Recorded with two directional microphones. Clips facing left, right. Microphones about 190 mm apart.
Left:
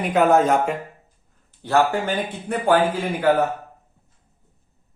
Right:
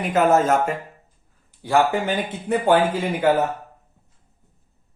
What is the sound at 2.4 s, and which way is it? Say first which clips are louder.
Speech: right 1 dB; 20° right (ahead or behind).